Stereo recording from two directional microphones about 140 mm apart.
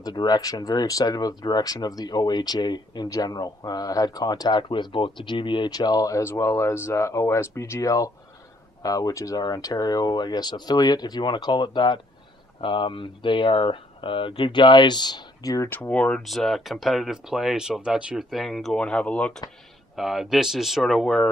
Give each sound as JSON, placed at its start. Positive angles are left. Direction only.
{"t": 0.0, "sound": "speech", "side_deg": 30}
{"t": 15.7, "sound": "speech", "side_deg": 10}